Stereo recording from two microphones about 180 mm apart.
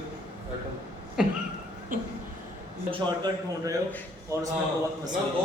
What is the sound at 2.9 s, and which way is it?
Speech, 20° right (ahead or behind).